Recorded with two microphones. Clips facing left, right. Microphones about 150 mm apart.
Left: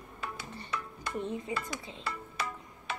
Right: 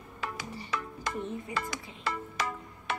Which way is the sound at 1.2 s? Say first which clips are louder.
Left 6 dB; 20° left (ahead or behind).